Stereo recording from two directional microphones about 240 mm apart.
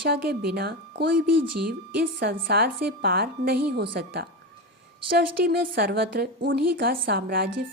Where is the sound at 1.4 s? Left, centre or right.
Right.